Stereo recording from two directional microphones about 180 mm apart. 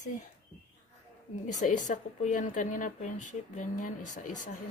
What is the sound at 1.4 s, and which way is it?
A woman's voice, 45° left (ahead or behind).